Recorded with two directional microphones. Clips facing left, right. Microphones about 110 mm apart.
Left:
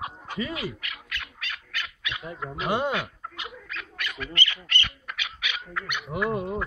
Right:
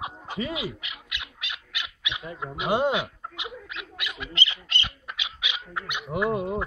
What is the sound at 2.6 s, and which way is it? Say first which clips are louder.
Speech: right 3 dB; 15° right (ahead or behind).